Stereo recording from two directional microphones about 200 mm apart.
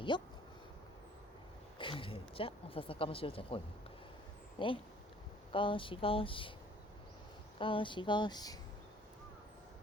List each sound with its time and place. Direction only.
0.1 s speech: 25° left (ahead or behind)
1.8 s speech: 25° left (ahead or behind)
7.6 s speech: 25° left (ahead or behind)